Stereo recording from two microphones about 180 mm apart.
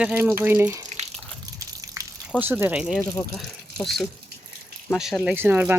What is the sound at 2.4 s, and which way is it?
Speech, 10° right (ahead or behind).